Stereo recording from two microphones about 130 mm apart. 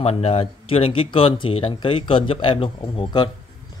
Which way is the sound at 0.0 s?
50° left (ahead or behind).